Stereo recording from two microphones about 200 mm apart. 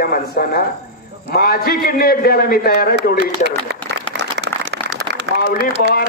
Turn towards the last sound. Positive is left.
turn(degrees=45)  # may be behind; listen again after turning